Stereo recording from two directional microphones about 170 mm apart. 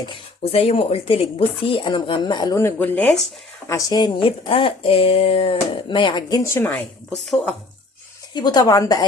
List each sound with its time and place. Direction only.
0.0 s speech: 30° left (ahead or behind); by 3.2 s 5° left (ahead or behind)
3.7 s speech: 20° left (ahead or behind)
8.3 s speech: 25° left (ahead or behind)